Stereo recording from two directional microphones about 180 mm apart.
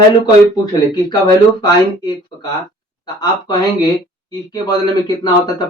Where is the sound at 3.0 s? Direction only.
20° left (ahead or behind).